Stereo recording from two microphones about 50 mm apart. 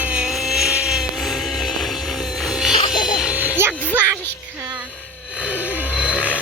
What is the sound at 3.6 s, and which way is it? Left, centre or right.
Music, right.